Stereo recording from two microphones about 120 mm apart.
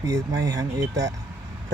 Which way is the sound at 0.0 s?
30° right (ahead or behind).